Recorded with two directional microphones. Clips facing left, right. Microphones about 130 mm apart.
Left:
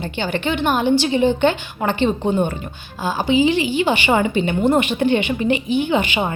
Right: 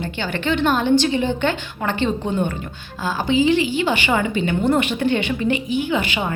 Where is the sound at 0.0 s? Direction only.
20° left (ahead or behind).